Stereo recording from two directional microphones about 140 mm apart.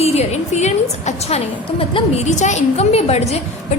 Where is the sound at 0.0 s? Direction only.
50° left (ahead or behind).